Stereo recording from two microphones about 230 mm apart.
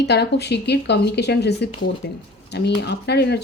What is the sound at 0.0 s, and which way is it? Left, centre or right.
Speech, left.